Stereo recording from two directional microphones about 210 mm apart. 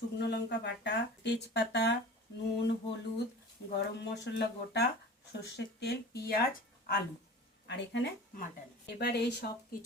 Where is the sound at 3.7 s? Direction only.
55° left (ahead or behind).